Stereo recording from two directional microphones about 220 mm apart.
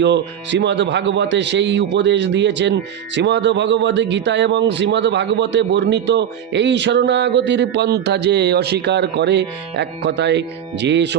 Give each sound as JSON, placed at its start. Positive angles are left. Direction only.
{"t": 0.0, "sound": "a man's voice", "side_deg": -55}